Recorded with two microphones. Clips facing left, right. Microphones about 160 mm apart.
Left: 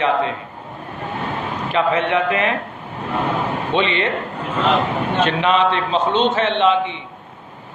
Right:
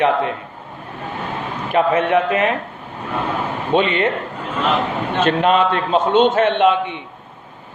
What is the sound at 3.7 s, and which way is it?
Speech, 45° right (ahead or behind).